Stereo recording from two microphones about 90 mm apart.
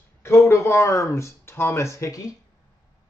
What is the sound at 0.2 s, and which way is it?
Speech, 30° left (ahead or behind).